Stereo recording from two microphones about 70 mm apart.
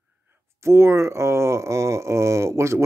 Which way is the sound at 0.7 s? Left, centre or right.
Right.